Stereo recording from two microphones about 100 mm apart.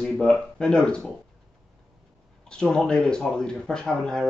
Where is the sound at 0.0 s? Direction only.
5° left (ahead or behind).